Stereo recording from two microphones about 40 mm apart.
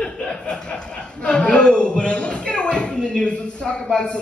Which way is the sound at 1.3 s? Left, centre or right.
Left.